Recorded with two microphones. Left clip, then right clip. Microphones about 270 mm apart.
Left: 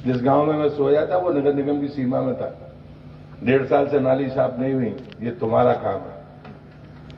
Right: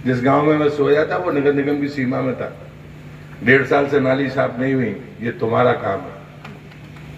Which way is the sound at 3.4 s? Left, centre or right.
Right.